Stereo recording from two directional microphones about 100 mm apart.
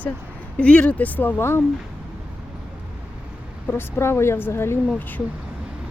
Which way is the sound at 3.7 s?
25° left (ahead or behind).